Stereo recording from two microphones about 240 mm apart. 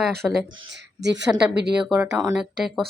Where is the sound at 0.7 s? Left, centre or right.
Right.